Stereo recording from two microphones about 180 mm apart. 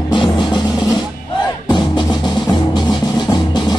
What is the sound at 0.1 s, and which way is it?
Music, 25° left (ahead or behind).